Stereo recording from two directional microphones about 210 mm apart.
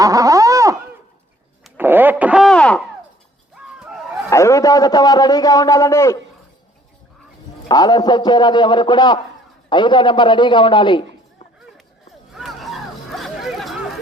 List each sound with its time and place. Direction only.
0.0 s a sound: 15° right (ahead or behind)
4.3 s a man's voice: 15° left (ahead or behind)
7.7 s a man's voice: 20° left (ahead or behind)
12.3 s chatter: centre (ahead or behind)